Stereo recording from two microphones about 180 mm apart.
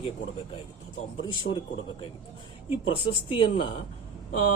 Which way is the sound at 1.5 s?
55° left (ahead or behind).